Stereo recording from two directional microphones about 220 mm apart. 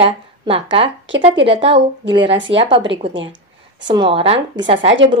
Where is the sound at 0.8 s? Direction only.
55° right (ahead or behind).